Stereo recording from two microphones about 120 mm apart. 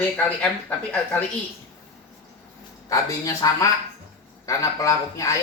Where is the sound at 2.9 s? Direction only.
30° left (ahead or behind).